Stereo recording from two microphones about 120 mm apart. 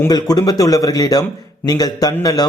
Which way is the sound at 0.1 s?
35° left (ahead or behind).